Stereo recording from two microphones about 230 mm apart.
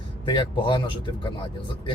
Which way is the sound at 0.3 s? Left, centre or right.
Left.